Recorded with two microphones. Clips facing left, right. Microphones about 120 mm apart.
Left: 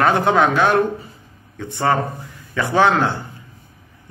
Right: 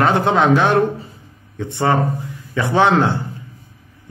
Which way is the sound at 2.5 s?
25° right (ahead or behind).